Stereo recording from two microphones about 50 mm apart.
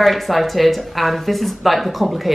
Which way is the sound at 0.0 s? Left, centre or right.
Centre.